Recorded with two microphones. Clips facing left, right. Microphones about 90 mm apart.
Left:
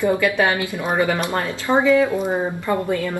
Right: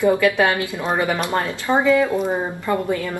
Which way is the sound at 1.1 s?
15° right (ahead or behind).